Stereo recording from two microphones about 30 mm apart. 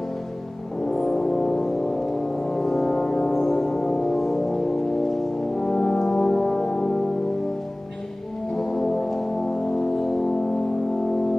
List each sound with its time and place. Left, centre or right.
0.8 s music: centre
5.6 s brass instrument: left
8.5 s music: centre